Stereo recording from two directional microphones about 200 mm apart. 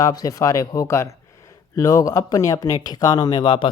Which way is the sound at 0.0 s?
20° left (ahead or behind).